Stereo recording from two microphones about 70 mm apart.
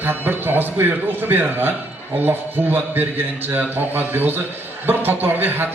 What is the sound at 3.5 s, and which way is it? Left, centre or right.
A man's voice, right.